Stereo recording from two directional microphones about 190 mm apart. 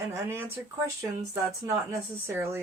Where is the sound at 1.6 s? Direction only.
15° right (ahead or behind).